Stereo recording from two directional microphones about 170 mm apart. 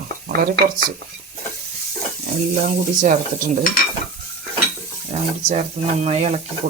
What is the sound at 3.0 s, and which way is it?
Stir, 50° right (ahead or behind).